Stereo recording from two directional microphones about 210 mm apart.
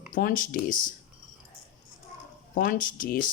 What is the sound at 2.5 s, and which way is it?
Speech, 40° left (ahead or behind).